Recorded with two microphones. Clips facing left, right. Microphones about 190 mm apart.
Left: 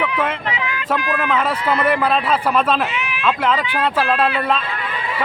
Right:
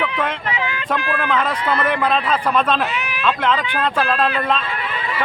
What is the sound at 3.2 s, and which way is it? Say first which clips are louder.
A man's voice: left 1 dB; 5° left (ahead or behind).